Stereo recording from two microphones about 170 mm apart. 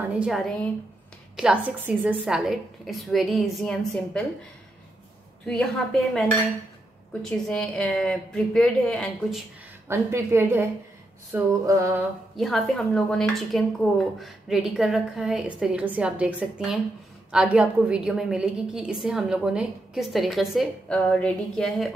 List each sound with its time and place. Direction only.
0.2 s a woman's voice: centre (ahead or behind)
5.4 s a woman's voice: 5° left (ahead or behind)
9.8 s a woman's voice: 15° right (ahead or behind)
12.4 s a woman's voice: centre (ahead or behind)